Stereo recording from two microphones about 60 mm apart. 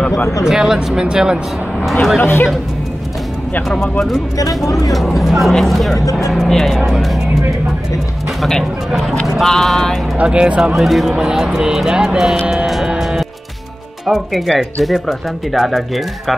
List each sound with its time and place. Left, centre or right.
0.5 s speech: centre
2.1 s speech: left
4.6 s speech: left
5.2 s speech: centre
8.4 s speech: centre
10.1 s speech: centre
10.8 s speech: centre
12.9 s music: centre
14.0 s speech: centre